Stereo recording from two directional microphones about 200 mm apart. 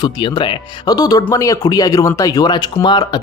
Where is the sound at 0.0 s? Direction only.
20° left (ahead or behind).